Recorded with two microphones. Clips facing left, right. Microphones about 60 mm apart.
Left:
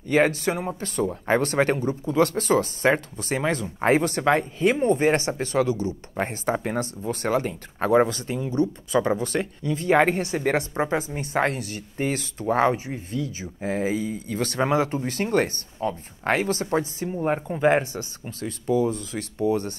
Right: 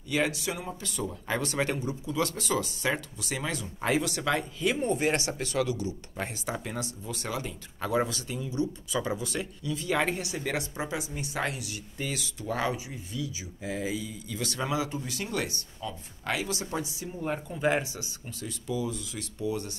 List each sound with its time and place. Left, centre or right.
0.1 s speech: left